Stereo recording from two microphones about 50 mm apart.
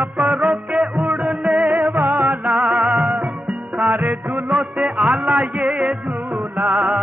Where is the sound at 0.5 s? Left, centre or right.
Centre.